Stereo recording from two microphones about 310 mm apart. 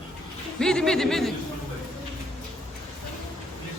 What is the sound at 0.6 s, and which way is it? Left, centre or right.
Speech, centre.